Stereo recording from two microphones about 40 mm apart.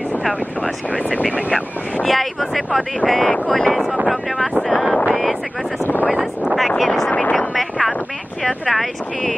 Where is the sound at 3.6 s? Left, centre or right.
Centre.